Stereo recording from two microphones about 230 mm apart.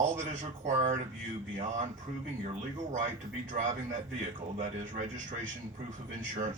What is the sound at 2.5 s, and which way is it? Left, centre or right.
A man's voice, right.